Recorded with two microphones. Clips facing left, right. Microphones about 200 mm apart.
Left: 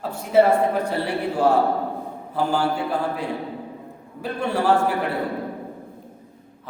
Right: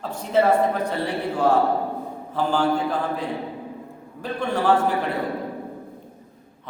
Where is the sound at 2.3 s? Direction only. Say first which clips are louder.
Even; 10° left (ahead or behind).